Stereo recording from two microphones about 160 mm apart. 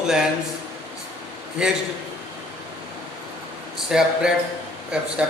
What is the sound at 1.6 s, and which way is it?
Speech, 5° right (ahead or behind).